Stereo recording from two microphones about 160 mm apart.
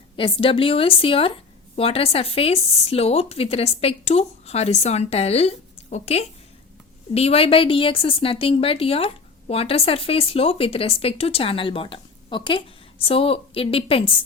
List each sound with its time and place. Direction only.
0.2 s a woman's voice: 35° left (ahead or behind)